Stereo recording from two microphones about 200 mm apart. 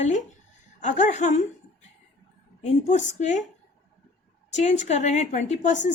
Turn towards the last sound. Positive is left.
turn(degrees=35)  # may be behind; listen again after turning